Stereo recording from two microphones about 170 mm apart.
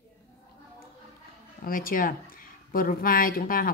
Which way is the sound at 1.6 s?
55° left (ahead or behind).